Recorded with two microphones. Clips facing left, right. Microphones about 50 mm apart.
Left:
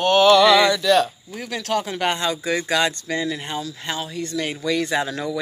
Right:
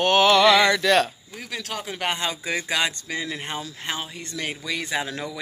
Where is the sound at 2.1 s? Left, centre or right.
Right.